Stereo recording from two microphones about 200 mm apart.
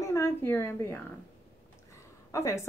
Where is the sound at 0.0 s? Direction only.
15° left (ahead or behind).